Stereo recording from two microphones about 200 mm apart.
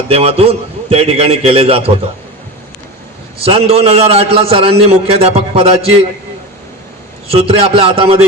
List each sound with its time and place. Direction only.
0.1 s a man's voice: 30° right (ahead or behind)
3.4 s a man's voice: 30° right (ahead or behind)
7.3 s a man's voice: 30° right (ahead or behind)